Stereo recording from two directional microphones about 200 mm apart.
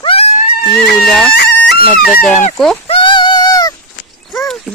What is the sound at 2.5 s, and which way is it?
Speech, centre (ahead or behind).